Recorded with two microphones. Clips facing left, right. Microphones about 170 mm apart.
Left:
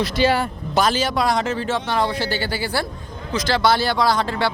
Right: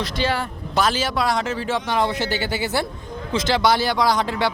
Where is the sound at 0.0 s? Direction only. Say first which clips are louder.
Left 5 dB; 10° left (ahead or behind).